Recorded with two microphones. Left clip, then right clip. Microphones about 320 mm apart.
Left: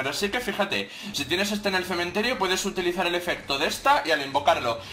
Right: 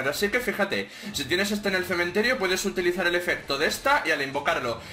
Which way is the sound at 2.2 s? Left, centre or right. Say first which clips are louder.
Even; centre.